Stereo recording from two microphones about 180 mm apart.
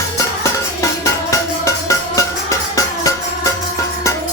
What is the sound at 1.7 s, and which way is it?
Music, 15° left (ahead or behind).